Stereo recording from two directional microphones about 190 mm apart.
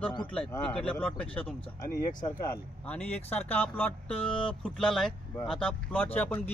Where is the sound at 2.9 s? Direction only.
10° left (ahead or behind).